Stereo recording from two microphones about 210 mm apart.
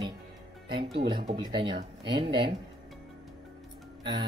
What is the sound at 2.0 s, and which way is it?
Speech, 25° right (ahead or behind).